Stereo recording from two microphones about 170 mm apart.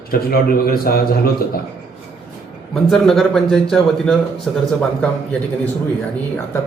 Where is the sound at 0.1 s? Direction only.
60° left (ahead or behind).